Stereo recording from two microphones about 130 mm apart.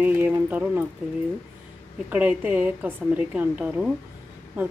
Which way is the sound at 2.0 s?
15° right (ahead or behind).